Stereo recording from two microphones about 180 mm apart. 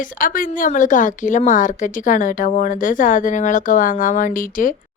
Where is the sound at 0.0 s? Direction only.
50° left (ahead or behind).